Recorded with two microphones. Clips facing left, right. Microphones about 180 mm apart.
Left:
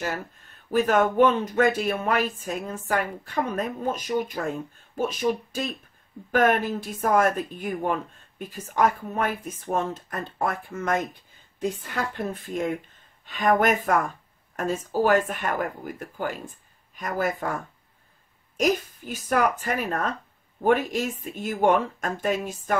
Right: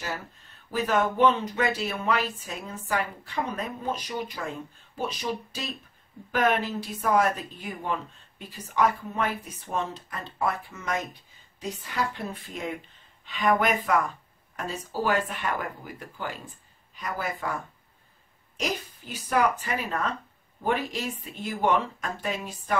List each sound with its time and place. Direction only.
0.7 s speech: 50° left (ahead or behind)
18.6 s speech: 45° left (ahead or behind)